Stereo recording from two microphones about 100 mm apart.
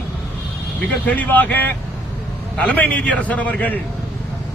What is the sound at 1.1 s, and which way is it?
A man's voice, 15° left (ahead or behind).